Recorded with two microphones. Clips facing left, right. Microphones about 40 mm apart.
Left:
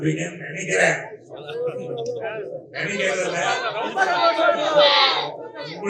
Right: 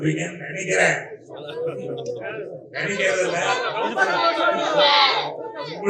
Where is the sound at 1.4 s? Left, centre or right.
Centre.